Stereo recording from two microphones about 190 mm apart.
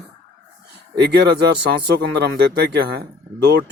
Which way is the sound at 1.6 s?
55° right (ahead or behind).